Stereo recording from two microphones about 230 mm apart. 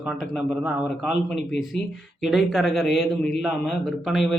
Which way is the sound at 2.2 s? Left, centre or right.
Centre.